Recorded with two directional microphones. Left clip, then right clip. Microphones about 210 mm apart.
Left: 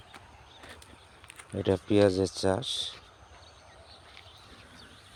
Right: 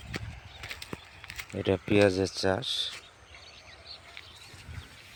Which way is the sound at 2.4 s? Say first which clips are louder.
Even; 15° left (ahead or behind).